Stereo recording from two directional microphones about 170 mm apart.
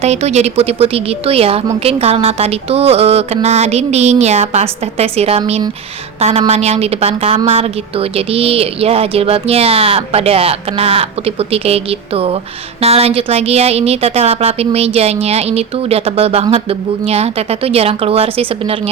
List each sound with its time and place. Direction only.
0.0 s a woman's voice: 40° right (ahead or behind)